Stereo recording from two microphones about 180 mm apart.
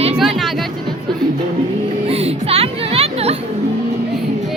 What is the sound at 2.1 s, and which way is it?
Music, 35° right (ahead or behind).